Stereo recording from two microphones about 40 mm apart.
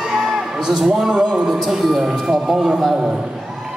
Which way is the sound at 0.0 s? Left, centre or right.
Centre.